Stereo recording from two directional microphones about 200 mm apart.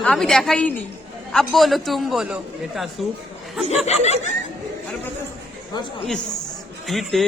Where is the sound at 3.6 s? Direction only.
35° left (ahead or behind).